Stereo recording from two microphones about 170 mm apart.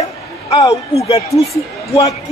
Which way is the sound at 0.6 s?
20° left (ahead or behind).